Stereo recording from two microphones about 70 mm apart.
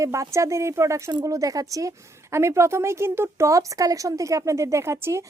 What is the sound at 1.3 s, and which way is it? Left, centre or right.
A woman's voice, right.